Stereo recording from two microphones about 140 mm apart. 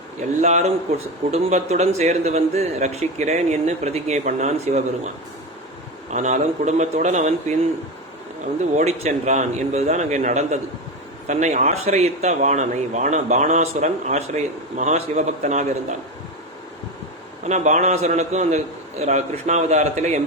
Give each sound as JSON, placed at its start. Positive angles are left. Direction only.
{"t": 0.4, "sound": "speech", "side_deg": -55}
{"t": 6.1, "sound": "speech", "side_deg": -60}
{"t": 8.7, "sound": "speech", "side_deg": -50}
{"t": 17.4, "sound": "speech", "side_deg": -55}